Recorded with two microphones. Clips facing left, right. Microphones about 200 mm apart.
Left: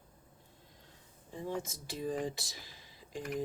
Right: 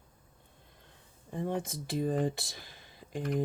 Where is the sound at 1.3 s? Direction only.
55° right (ahead or behind).